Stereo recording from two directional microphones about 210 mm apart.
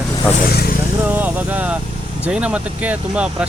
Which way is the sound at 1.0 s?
10° right (ahead or behind).